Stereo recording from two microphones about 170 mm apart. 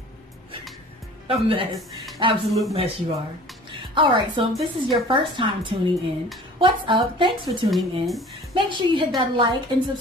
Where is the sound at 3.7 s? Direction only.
30° right (ahead or behind).